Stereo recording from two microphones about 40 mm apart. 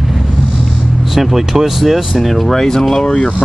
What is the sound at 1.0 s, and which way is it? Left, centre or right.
Speech, centre.